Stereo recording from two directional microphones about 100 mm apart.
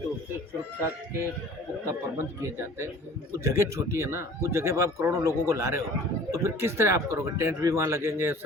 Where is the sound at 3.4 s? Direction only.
30° right (ahead or behind).